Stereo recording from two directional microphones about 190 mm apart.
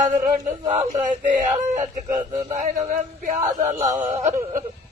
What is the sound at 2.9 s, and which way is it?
Speech, 45° right (ahead or behind).